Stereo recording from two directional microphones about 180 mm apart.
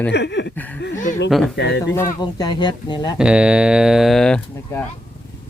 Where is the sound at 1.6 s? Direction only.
75° left (ahead or behind).